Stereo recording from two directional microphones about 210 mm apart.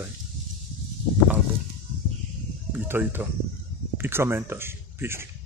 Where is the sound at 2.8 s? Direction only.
10° right (ahead or behind).